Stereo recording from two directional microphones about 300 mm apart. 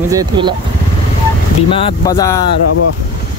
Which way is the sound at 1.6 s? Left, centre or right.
Centre.